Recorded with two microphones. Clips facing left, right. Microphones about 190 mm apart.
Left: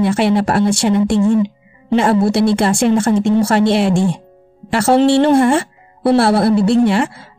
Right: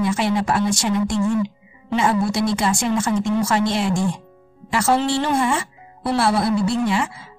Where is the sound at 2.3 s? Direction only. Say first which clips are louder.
Left 7 dB; 65° left (ahead or behind).